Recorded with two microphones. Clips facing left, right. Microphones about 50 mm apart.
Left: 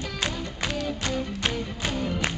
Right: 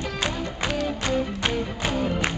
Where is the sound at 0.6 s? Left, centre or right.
Centre.